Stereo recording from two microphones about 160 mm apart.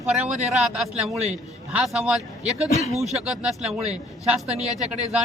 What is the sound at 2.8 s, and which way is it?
Speech, 45° right (ahead or behind).